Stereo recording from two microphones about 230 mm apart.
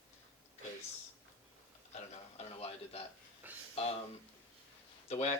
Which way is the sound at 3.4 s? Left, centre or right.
Centre.